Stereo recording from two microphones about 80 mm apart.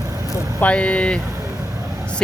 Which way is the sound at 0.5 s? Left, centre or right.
Centre.